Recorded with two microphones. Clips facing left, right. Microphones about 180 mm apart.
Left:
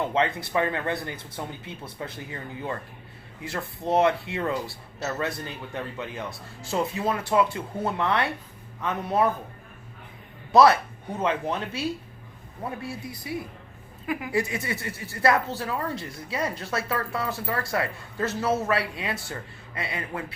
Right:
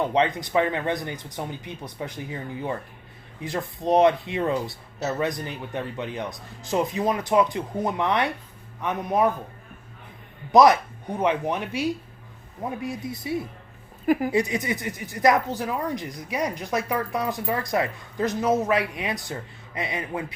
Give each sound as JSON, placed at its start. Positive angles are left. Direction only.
{"t": 0.0, "sound": "speech", "side_deg": -15}
{"t": 10.5, "sound": "speech", "side_deg": -15}